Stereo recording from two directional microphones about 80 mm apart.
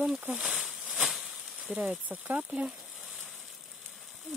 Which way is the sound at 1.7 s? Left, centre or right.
Centre.